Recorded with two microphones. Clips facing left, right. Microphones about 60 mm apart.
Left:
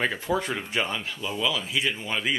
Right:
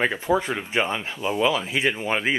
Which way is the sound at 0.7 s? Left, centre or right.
Right.